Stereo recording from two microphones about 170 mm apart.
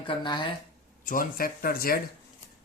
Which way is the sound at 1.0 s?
55° left (ahead or behind).